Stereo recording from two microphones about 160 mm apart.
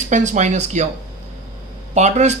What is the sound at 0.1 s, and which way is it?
Speech, 50° right (ahead or behind).